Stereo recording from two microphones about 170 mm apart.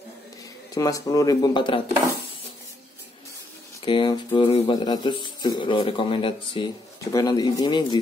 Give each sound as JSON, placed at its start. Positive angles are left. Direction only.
{"t": 0.7, "sound": "speech", "side_deg": 20}
{"t": 3.8, "sound": "speech", "side_deg": 30}